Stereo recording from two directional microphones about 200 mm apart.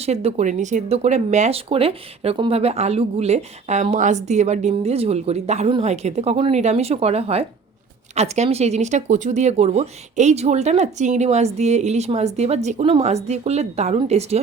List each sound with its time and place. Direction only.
0.0 s speech: 30° right (ahead or behind)